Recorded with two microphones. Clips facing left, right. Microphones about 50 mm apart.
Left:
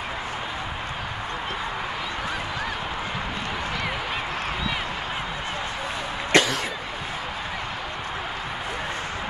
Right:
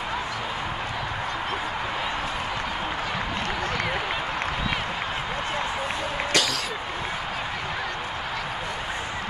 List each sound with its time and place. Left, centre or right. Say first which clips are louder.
6.3 s cough: left 6 dB; left